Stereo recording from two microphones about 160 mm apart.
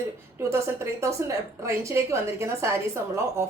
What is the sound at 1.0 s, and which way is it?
A woman's voice, 20° right (ahead or behind).